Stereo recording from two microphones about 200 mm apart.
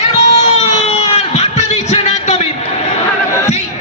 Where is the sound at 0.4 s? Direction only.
35° left (ahead or behind).